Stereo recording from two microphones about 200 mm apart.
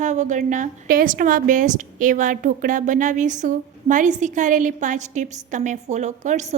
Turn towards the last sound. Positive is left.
turn(degrees=-35)  # may be behind; listen again after turning